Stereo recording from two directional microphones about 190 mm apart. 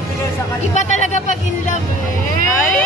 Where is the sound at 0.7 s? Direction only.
40° left (ahead or behind).